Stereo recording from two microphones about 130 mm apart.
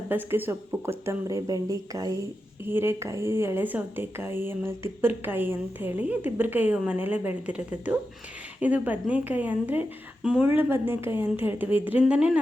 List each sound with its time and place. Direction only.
0.1 s speech: 15° right (ahead or behind)
10.6 s speech: 15° right (ahead or behind)